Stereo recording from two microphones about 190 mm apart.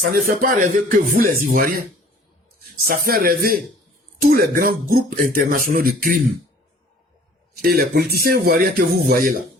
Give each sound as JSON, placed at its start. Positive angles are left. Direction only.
{"t": 0.1, "sound": "speech", "side_deg": -50}
{"t": 2.8, "sound": "speech", "side_deg": -50}
{"t": 7.6, "sound": "speech", "side_deg": -50}